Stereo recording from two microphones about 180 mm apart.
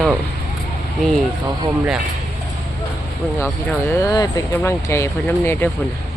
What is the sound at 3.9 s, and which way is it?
Speech, 15° left (ahead or behind).